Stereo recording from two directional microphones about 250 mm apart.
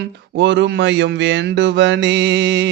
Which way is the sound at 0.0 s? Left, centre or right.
Right.